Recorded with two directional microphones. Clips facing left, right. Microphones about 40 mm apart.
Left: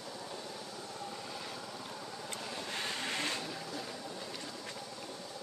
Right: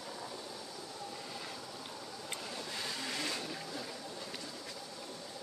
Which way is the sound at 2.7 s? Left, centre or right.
Left.